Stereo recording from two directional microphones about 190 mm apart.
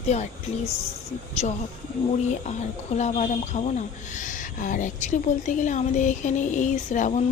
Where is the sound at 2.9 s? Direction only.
35° left (ahead or behind).